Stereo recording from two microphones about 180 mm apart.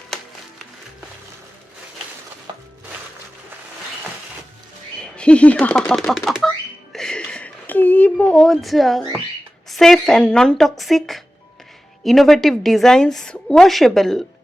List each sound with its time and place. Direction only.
0.1 s music: 5° left (ahead or behind)
2.5 s music: 25° right (ahead or behind)
4.9 s speech: 5° left (ahead or behind)
6.9 s a sound: 5° left (ahead or behind)
9.6 s a woman's voice: centre (ahead or behind)